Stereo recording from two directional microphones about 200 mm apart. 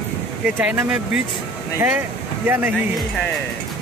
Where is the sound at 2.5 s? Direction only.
10° right (ahead or behind).